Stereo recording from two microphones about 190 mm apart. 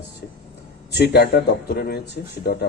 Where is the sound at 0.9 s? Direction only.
60° left (ahead or behind).